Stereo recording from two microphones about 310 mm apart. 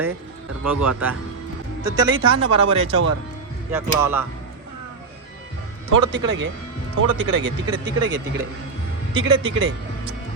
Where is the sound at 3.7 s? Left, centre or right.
Centre.